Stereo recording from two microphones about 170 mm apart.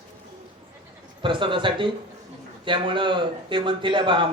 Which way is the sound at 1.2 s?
30° right (ahead or behind).